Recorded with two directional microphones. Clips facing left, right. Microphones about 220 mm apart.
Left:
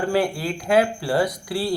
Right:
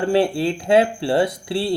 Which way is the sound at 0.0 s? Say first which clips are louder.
Right 4 dB; 25° right (ahead or behind).